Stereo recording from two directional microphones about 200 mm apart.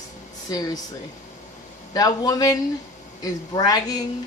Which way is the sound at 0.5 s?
20° left (ahead or behind).